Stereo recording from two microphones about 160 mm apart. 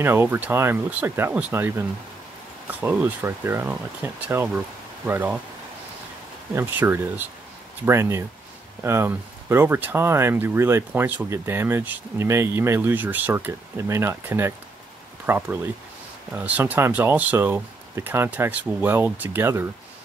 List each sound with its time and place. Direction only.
0.0 s speech: 15° right (ahead or behind)
6.5 s speech: 15° right (ahead or behind)